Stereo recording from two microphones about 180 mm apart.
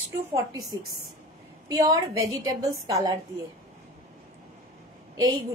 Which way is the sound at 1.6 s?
20° right (ahead or behind).